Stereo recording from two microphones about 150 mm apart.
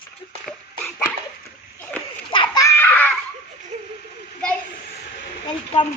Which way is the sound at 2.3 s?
30° left (ahead or behind).